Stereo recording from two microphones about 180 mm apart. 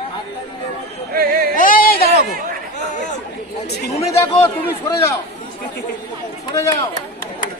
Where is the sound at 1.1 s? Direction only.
55° right (ahead or behind).